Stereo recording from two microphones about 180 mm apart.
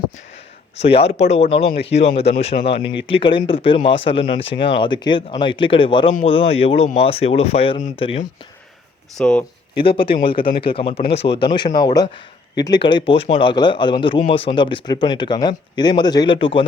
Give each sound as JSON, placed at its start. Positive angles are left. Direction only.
{"t": 0.8, "sound": "speech", "side_deg": 35}
{"t": 9.1, "sound": "speech", "side_deg": 5}
{"t": 9.8, "sound": "speech", "side_deg": 30}